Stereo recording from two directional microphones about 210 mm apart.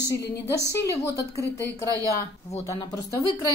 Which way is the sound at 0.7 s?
15° left (ahead or behind).